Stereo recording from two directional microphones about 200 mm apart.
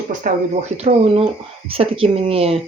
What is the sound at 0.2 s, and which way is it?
Speech, 45° right (ahead or behind).